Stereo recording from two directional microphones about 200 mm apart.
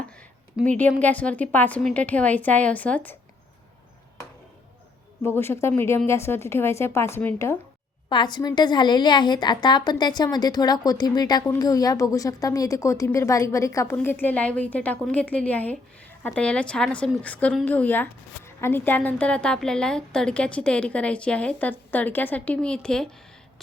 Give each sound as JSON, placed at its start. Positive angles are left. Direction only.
{"t": 0.7, "sound": "a woman's voice", "side_deg": 5}
{"t": 5.2, "sound": "a woman's voice", "side_deg": 10}
{"t": 8.1, "sound": "a woman's voice", "side_deg": 20}